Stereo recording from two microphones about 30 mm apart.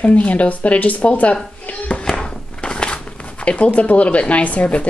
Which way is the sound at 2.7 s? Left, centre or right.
Left.